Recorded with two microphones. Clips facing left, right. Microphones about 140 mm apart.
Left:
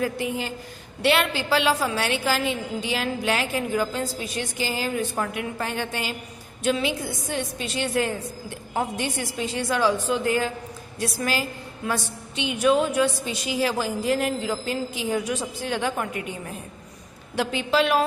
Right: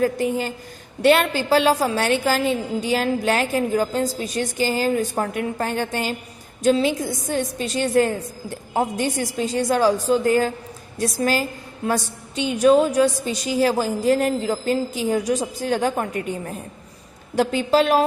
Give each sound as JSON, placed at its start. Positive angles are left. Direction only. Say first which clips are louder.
{"t": 0.0, "sound": "a woman's voice", "louder": "right 6 dB", "side_deg": -45}